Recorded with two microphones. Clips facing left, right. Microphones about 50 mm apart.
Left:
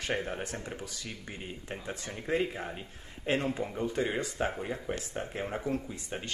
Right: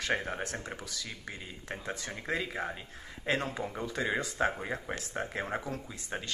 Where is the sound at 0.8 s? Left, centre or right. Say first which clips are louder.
Even; right.